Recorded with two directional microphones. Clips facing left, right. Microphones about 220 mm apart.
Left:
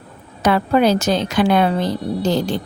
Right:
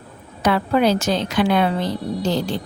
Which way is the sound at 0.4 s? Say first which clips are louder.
Left 2 dB; 45° left (ahead or behind).